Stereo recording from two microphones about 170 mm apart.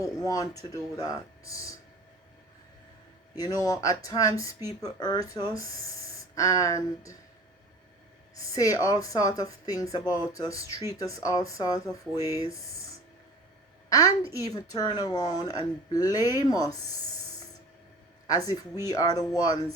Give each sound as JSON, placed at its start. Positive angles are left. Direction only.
{"t": 0.3, "sound": "a woman's voice", "side_deg": 20}
{"t": 3.3, "sound": "a woman's voice", "side_deg": 20}
{"t": 8.5, "sound": "a woman's voice", "side_deg": 20}
{"t": 13.9, "sound": "a woman's voice", "side_deg": 20}
{"t": 18.9, "sound": "a woman's voice", "side_deg": 20}